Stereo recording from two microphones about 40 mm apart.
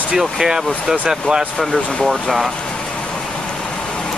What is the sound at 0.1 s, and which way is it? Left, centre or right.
Speech, centre.